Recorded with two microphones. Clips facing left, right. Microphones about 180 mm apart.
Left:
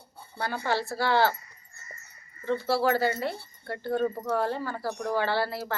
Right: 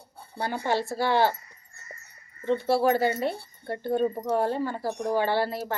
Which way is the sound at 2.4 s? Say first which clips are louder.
Right 3 dB; 20° right (ahead or behind).